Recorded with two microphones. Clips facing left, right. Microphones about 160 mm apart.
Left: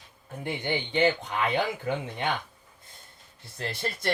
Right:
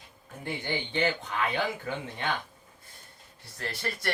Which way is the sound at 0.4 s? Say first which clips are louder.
Left 3 dB; 20° left (ahead or behind).